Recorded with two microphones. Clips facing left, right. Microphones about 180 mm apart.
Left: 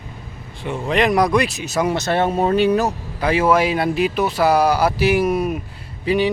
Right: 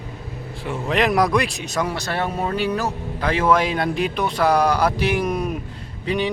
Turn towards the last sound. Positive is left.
turn(degrees=5)  # may be behind; listen again after turning